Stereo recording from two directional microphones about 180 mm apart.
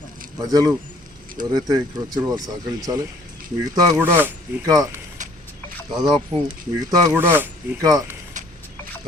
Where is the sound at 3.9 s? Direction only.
10° right (ahead or behind).